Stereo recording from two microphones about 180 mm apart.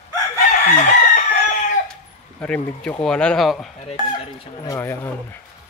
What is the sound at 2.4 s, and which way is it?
Speech, 5° left (ahead or behind).